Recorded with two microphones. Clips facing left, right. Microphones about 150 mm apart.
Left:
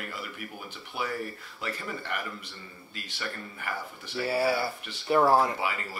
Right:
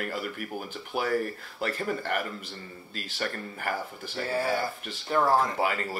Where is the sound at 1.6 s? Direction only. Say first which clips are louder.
Right 6 dB; 45° right (ahead or behind).